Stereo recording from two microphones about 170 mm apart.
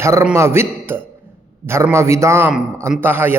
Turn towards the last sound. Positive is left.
turn(degrees=-10)  # may be behind; listen again after turning